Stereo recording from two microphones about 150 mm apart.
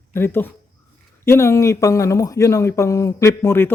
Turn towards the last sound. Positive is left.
turn(degrees=15)  # may be behind; listen again after turning